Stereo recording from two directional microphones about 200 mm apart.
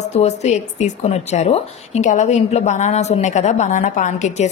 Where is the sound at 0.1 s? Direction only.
35° left (ahead or behind).